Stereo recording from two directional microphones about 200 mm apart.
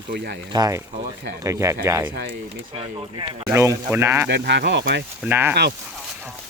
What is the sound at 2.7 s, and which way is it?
Speech, 25° right (ahead or behind).